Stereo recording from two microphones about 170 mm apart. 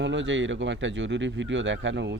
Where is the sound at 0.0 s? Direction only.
90° right.